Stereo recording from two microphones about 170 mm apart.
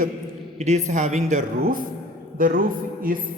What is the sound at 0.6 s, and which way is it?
A man's voice, 45° right (ahead or behind).